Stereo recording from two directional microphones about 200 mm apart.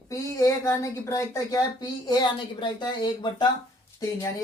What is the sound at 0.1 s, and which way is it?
Speech, 15° left (ahead or behind).